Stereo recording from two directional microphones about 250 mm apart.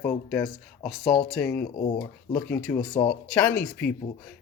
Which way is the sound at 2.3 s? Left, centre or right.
Centre.